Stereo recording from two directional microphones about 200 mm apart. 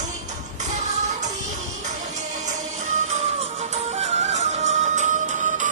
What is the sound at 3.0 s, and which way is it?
Music, 35° right (ahead or behind).